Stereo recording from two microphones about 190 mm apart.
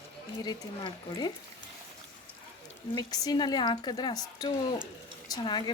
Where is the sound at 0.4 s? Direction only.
25° left (ahead or behind).